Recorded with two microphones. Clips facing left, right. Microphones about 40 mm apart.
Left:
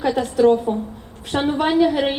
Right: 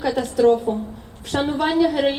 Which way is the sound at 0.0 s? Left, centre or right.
Centre.